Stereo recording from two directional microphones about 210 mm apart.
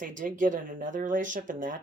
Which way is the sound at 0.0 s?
40° right (ahead or behind).